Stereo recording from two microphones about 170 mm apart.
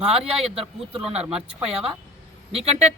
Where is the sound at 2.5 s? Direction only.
35° right (ahead or behind).